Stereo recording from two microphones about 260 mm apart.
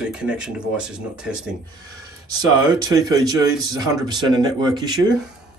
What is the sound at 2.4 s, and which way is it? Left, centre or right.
Speech, centre.